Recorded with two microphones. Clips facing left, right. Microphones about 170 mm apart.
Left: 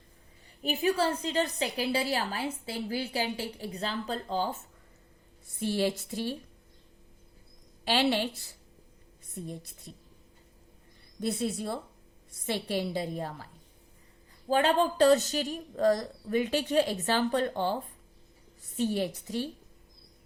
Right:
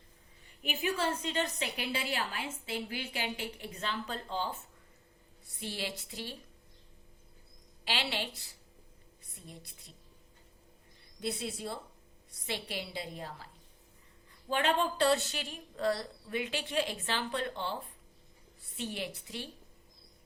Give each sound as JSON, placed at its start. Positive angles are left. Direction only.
{"t": 0.6, "sound": "a woman's voice", "side_deg": 35}
{"t": 5.5, "sound": "a woman's voice", "side_deg": 45}
{"t": 7.9, "sound": "a woman's voice", "side_deg": 45}
{"t": 9.5, "sound": "a woman's voice", "side_deg": 45}
{"t": 11.2, "sound": "a woman's voice", "side_deg": 50}
{"t": 14.4, "sound": "a woman's voice", "side_deg": 35}